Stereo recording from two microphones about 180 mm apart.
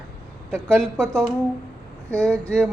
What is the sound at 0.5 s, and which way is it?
A man's voice, centre (ahead or behind).